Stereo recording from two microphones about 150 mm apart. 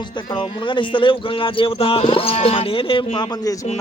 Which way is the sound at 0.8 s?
35° left (ahead or behind).